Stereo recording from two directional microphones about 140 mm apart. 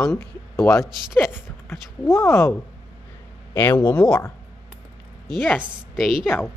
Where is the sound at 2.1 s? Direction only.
20° left (ahead or behind).